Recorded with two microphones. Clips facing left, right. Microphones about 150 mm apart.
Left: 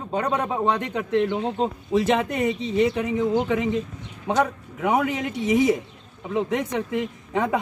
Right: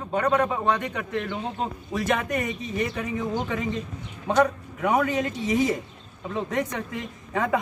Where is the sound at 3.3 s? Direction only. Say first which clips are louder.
Left 6 dB; 15° left (ahead or behind).